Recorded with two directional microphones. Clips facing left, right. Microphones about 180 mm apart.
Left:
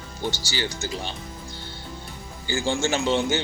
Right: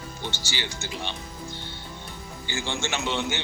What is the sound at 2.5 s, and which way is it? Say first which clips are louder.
Speech: left 7 dB; 35° left (ahead or behind).